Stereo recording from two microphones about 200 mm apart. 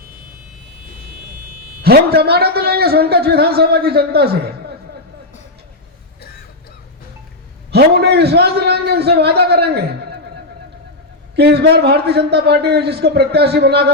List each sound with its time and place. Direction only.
1.8 s a man's voice: 50° right (ahead or behind)
7.7 s a man's voice: 55° right (ahead or behind)
11.3 s a man's voice: 55° right (ahead or behind)